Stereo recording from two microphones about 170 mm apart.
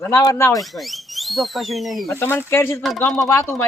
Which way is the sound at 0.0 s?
15° left (ahead or behind).